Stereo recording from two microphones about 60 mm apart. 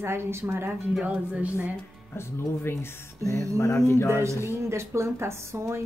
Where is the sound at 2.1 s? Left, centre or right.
Left.